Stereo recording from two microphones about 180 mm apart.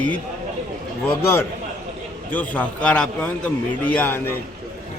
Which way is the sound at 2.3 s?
10° left (ahead or behind).